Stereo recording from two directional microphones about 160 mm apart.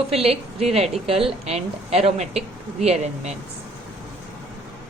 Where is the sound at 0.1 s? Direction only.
40° right (ahead or behind).